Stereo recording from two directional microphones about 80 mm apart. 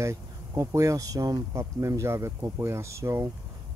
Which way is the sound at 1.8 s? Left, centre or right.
Right.